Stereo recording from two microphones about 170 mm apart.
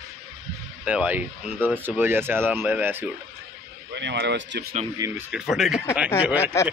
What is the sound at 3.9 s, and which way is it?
Speech, 90° right.